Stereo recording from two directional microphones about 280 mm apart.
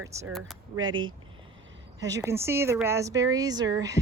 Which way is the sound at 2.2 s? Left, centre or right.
Centre.